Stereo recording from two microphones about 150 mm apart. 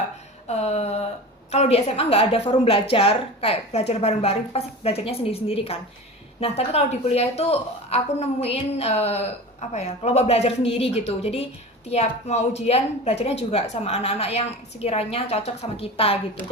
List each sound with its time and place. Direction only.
0.4 s a woman's voice: 45° left (ahead or behind)